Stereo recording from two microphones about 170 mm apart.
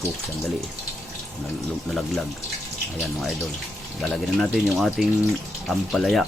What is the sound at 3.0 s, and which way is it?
Speech, centre (ahead or behind).